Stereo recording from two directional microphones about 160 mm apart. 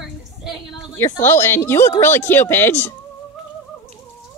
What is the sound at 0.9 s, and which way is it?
A woman's voice, 15° left (ahead or behind).